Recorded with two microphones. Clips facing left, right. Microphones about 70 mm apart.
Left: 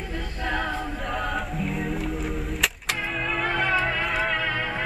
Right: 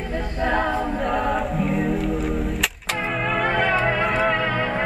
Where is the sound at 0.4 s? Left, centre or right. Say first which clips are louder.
Right 6 dB; right.